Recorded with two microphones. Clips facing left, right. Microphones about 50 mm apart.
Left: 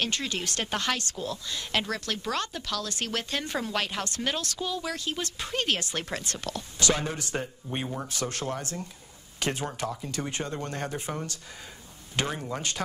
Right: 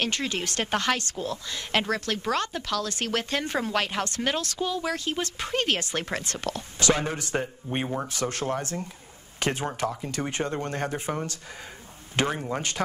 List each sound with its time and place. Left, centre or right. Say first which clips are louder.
0.0 s speech: right 2 dB; right